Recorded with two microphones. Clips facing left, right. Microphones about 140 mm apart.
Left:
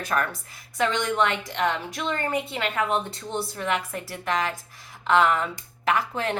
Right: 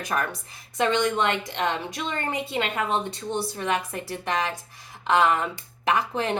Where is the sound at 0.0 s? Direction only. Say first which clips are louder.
Left 1 dB; 15° right (ahead or behind).